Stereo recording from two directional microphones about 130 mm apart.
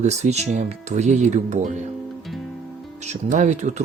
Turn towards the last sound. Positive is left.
turn(degrees=-65)  # may be behind; listen again after turning